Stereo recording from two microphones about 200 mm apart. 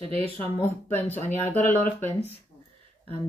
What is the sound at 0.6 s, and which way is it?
Speech, 10° left (ahead or behind).